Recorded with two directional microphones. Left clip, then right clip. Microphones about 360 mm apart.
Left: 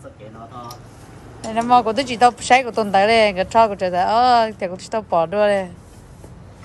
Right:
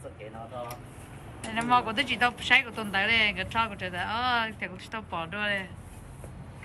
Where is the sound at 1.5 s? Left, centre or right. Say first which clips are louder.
Left 10 dB; centre.